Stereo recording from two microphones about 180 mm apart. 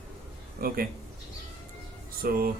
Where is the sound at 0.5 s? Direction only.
55° right (ahead or behind).